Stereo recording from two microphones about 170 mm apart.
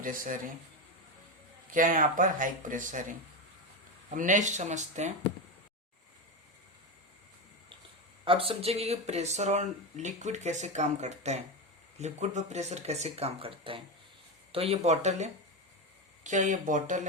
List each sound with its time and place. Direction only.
0.0 s speech: 50° right (ahead or behind)
1.7 s speech: 50° right (ahead or behind)
4.1 s speech: 50° right (ahead or behind)
8.2 s speech: 30° right (ahead or behind); by 17.0 s 50° right (ahead or behind)